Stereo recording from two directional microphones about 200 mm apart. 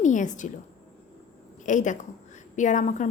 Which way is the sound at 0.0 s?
40° left (ahead or behind).